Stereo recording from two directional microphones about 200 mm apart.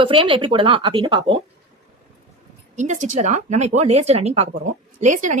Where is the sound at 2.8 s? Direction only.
40° right (ahead or behind).